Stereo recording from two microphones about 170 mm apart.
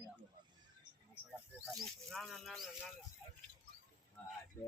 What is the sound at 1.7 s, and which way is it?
Speech, centre (ahead or behind).